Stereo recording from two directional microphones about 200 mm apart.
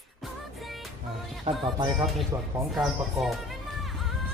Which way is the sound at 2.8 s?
Centre (ahead or behind).